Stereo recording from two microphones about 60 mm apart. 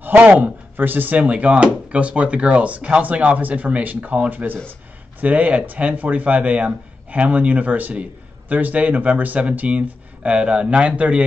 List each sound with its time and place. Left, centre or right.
0.0 s speech: right